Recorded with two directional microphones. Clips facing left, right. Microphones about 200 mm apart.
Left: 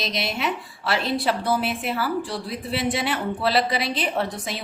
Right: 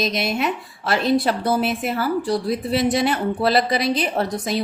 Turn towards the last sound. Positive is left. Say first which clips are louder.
# right 5 dB
turn(degrees=-40)  # may be behind; listen again after turning